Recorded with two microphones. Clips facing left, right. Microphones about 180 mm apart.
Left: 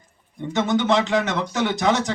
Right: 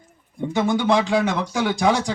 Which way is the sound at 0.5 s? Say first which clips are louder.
Even; 10° right (ahead or behind).